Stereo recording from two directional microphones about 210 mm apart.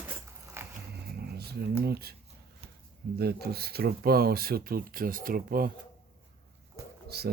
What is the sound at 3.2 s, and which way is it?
Speech, 50° right (ahead or behind).